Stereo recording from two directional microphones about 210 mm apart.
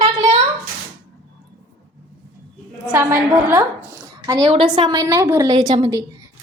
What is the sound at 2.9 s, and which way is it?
A woman's voice, 10° right (ahead or behind).